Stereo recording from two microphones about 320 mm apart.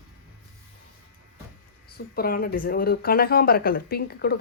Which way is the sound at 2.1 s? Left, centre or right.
Left.